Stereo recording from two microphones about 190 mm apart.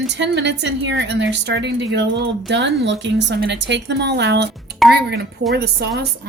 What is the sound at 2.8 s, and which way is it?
Cutlery, 70° right (ahead or behind).